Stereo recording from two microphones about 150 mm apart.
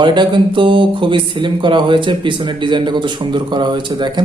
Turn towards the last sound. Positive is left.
turn(degrees=-30)  # may be behind; listen again after turning